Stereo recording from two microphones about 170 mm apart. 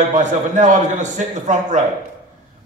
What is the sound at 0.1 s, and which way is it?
A man's voice, 45° right (ahead or behind).